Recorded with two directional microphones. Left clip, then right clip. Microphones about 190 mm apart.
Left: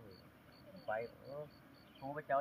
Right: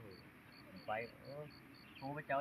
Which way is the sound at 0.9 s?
10° right (ahead or behind).